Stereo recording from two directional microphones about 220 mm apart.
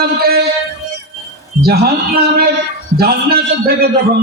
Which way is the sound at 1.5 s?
45° right (ahead or behind).